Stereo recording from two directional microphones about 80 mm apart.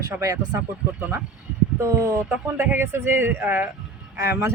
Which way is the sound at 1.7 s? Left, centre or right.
Right.